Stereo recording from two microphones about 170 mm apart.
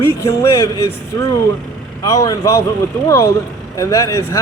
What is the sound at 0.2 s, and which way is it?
Speech, 20° left (ahead or behind).